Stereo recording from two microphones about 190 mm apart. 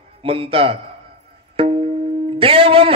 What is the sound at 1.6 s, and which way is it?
Music, 30° right (ahead or behind).